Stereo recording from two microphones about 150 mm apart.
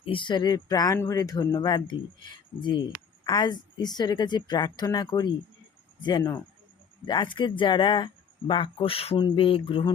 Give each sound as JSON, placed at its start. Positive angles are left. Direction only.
{"t": 0.0, "sound": "a woman's voice", "side_deg": 35}